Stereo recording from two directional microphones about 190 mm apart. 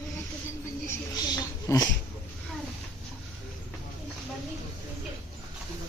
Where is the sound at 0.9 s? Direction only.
20° left (ahead or behind).